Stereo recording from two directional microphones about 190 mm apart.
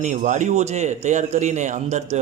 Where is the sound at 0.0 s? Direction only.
40° right (ahead or behind).